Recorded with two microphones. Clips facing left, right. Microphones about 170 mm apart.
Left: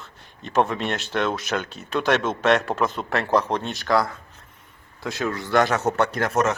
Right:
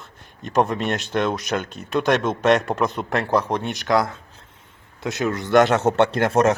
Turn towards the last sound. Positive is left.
turn(degrees=-30)  # may be behind; listen again after turning